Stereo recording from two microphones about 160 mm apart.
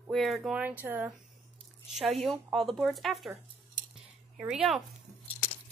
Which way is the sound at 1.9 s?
Centre (ahead or behind).